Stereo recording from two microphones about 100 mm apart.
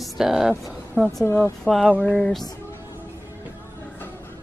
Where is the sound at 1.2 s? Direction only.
25° left (ahead or behind).